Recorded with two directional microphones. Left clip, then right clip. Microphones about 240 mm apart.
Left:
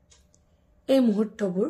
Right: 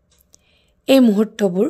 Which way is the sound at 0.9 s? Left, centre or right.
Right.